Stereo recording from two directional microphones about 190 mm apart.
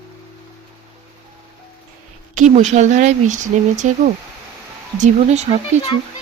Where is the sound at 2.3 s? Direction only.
40° right (ahead or behind).